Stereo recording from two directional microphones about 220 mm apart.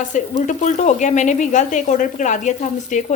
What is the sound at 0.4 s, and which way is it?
Speech, 35° left (ahead or behind).